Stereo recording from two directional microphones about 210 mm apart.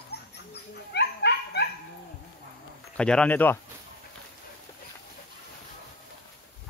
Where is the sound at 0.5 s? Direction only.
50° left (ahead or behind).